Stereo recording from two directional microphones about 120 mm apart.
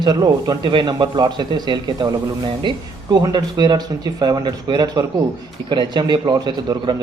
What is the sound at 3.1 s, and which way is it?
A man's voice, 35° right (ahead or behind).